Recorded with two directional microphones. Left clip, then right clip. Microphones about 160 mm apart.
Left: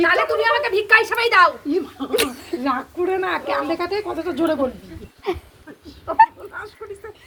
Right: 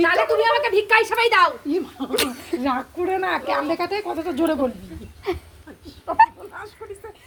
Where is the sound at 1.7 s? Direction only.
70° right (ahead or behind); by 4.6 s 90° right.